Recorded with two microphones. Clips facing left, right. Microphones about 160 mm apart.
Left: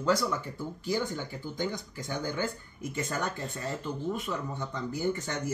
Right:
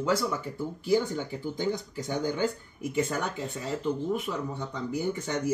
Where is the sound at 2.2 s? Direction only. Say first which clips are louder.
Right 4 dB; 15° right (ahead or behind).